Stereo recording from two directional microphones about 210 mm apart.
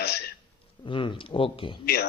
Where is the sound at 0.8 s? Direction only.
25° left (ahead or behind).